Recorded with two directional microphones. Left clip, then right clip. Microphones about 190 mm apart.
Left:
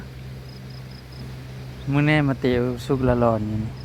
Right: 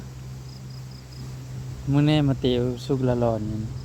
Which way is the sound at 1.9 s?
35° right (ahead or behind).